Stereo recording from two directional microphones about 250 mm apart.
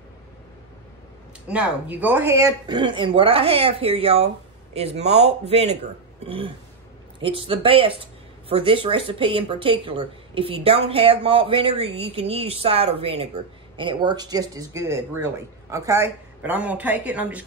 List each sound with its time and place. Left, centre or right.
1.5 s a woman's voice: centre